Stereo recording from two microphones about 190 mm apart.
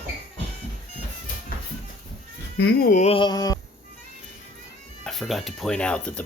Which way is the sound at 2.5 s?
60° left (ahead or behind).